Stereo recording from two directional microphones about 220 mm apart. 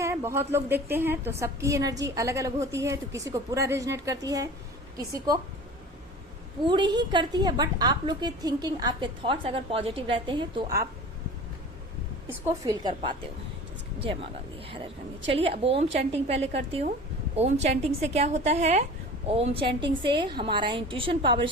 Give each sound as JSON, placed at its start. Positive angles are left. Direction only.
{"t": 0.0, "sound": "a woman's voice", "side_deg": -10}
{"t": 6.7, "sound": "a woman's voice", "side_deg": -20}
{"t": 12.3, "sound": "a woman's voice", "side_deg": -15}
{"t": 15.3, "sound": "a woman's voice", "side_deg": -25}